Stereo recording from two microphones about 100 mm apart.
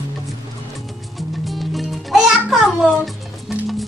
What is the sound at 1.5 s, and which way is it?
Music, centre (ahead or behind).